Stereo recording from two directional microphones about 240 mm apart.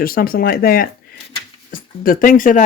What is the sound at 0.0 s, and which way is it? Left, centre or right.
Speech, left.